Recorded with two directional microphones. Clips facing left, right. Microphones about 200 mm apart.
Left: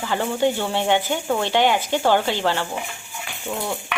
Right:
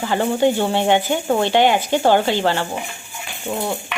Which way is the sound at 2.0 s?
45° right (ahead or behind).